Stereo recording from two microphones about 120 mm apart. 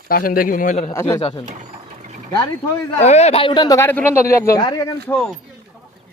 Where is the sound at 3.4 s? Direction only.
40° left (ahead or behind).